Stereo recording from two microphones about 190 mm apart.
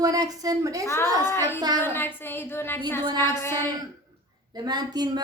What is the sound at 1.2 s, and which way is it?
A woman's voice, 15° left (ahead or behind).